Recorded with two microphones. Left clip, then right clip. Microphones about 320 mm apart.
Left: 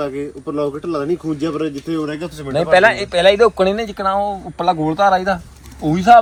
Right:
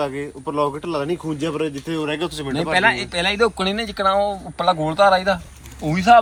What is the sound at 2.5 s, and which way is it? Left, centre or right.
Speech, left.